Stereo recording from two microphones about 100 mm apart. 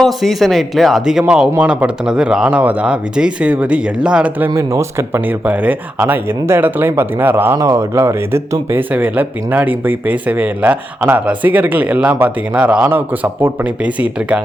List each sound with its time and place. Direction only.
0.0 s a man's voice: centre (ahead or behind); by 4.5 s 15° right (ahead or behind)
4.5 s speech: 30° right (ahead or behind)
5.5 s speech: 15° right (ahead or behind)